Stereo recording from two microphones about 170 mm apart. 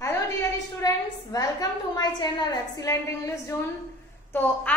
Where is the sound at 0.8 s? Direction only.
20° left (ahead or behind).